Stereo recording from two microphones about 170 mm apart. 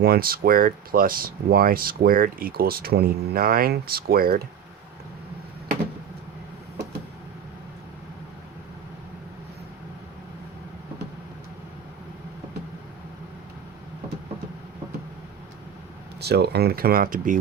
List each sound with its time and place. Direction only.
0.0 s speech: 65° right (ahead or behind)
16.2 s speech: 75° right (ahead or behind); by 17.4 s 55° right (ahead or behind)